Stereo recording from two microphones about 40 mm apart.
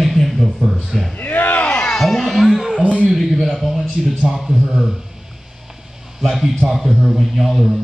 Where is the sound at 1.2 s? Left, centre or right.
Left.